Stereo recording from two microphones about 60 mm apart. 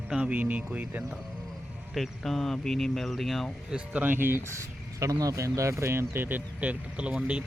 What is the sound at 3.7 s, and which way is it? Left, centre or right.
Speech, right.